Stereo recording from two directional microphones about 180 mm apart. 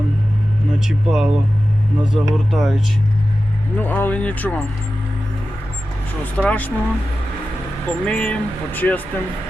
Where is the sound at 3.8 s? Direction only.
10° left (ahead or behind).